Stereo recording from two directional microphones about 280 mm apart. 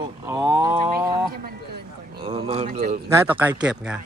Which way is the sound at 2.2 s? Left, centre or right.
Right.